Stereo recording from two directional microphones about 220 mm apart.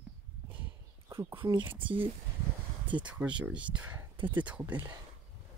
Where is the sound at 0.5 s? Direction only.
10° right (ahead or behind).